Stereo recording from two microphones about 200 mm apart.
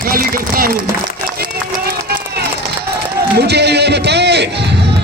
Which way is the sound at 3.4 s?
55° right (ahead or behind).